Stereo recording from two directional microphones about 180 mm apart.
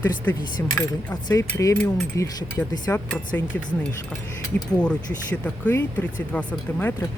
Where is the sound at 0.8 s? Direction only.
20° left (ahead or behind).